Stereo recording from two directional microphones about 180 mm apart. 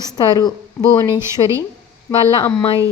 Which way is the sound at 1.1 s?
15° right (ahead or behind).